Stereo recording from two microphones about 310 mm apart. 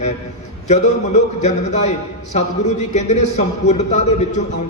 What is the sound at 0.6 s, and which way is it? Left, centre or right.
A man's voice, left.